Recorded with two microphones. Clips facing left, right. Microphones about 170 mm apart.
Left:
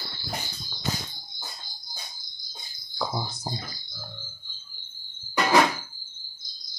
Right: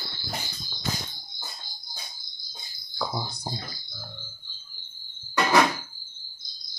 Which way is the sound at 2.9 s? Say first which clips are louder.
Left 1 dB; centre (ahead or behind).